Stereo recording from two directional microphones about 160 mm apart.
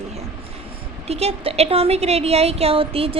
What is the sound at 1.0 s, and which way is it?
A woman's voice, 40° right (ahead or behind).